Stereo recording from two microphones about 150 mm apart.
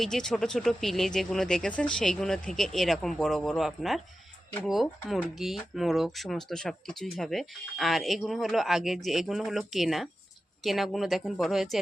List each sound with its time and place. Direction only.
0.0 s speech: 5° left (ahead or behind)